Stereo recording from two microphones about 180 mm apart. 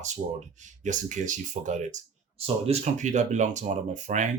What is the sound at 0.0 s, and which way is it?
Speech, 40° right (ahead or behind).